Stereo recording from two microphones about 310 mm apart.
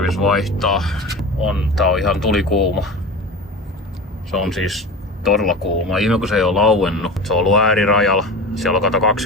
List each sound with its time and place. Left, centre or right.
0.0 s speech: centre
4.3 s speech: centre